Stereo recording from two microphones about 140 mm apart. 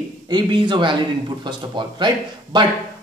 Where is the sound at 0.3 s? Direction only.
35° right (ahead or behind).